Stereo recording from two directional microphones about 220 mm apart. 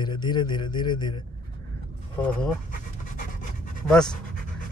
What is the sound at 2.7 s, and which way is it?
Pant, 35° left (ahead or behind).